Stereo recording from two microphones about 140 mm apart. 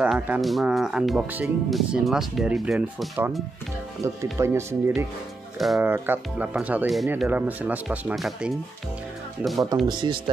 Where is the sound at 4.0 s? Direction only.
20° right (ahead or behind); by 9.7 s centre (ahead or behind).